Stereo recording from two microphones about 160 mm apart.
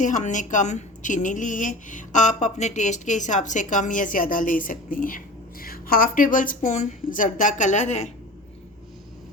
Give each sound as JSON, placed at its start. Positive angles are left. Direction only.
{"t": 0.0, "sound": "a woman's voice", "side_deg": 50}